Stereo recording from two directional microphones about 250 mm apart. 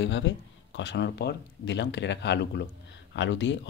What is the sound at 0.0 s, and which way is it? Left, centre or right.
Speech, left.